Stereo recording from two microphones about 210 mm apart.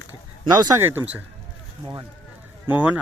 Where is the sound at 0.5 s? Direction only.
20° right (ahead or behind).